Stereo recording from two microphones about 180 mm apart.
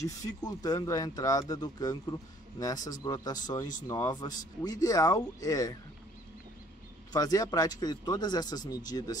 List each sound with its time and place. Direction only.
0.0 s speech: 20° left (ahead or behind)
7.1 s speech: 20° left (ahead or behind)